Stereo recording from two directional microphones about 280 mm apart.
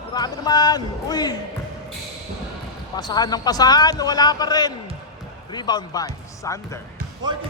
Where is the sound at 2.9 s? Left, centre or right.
Centre.